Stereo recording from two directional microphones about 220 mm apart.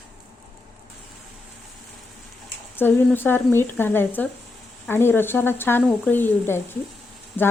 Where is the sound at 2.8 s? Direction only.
10° left (ahead or behind).